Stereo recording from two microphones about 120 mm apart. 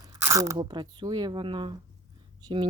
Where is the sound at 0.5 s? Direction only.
40° right (ahead or behind).